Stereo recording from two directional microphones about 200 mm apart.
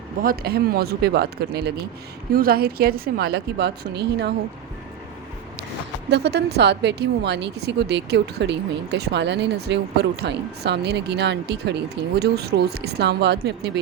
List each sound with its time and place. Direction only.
0.2 s a woman's voice: 50° right (ahead or behind)
6.1 s speech: 55° right (ahead or behind)